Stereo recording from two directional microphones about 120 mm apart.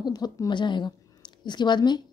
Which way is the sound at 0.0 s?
35° left (ahead or behind).